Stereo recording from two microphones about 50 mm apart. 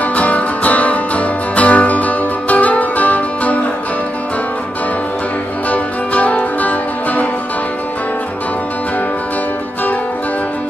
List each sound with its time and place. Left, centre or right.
0.0 s music: left
5.7 s music: left